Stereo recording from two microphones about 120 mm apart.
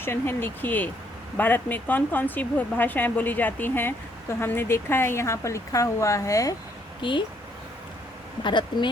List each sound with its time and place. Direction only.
0.0 s speech: 20° left (ahead or behind)
7.0 s speech: 45° left (ahead or behind)
8.4 s speech: 40° left (ahead or behind)